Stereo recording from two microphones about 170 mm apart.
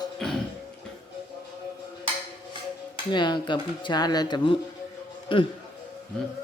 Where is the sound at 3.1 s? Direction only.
25° left (ahead or behind).